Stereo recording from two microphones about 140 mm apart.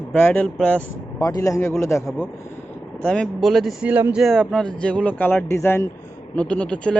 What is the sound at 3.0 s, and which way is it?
Speech, 5° left (ahead or behind).